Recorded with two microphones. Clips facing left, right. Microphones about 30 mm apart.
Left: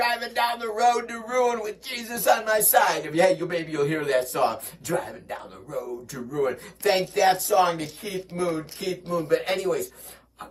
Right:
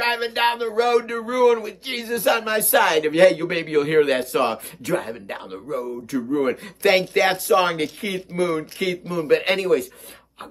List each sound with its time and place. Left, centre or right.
0.1 s speech: right